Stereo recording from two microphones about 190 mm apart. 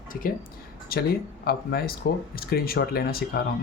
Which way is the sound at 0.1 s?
45° left (ahead or behind).